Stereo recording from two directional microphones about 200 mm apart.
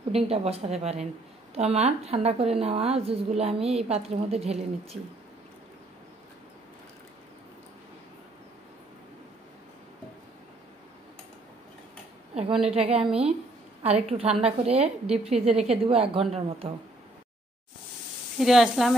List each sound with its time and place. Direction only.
0.1 s a woman's voice: 30° right (ahead or behind)
12.6 s a woman's voice: 30° right (ahead or behind)
18.4 s speech: centre (ahead or behind)